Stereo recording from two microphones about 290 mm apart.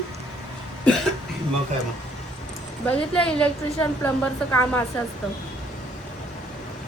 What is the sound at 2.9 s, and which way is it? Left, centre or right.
A woman's voice, centre.